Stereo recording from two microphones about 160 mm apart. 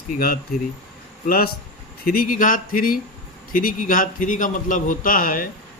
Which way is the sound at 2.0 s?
60° left (ahead or behind).